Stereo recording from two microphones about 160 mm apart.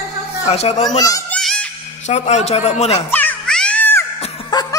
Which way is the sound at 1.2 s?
5° left (ahead or behind).